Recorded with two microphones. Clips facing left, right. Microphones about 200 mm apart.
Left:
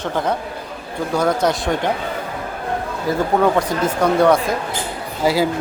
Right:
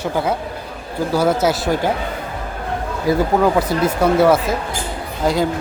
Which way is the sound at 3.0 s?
10° right (ahead or behind).